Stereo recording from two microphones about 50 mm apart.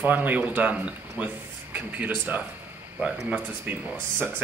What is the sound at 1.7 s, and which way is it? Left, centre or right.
A woman's voice, right.